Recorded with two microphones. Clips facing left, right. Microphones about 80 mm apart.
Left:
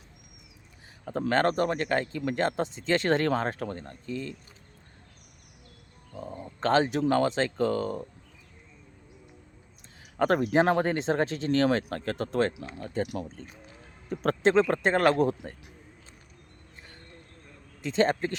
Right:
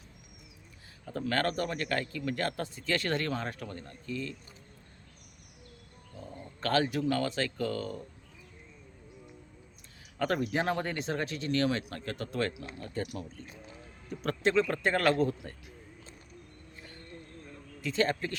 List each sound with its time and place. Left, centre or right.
1.0 s speech: left
3.2 s speech: left
3.5 s speech: left
6.1 s speech: left
10.2 s speech: left
12.1 s speech: left
17.7 s a man's voice: left